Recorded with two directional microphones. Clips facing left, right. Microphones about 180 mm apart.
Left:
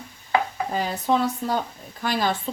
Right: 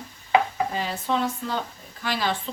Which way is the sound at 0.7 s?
45° left (ahead or behind).